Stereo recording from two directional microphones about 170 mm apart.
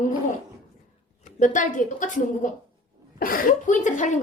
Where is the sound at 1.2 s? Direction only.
45° left (ahead or behind).